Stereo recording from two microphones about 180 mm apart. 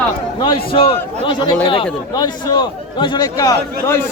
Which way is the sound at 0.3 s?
25° left (ahead or behind).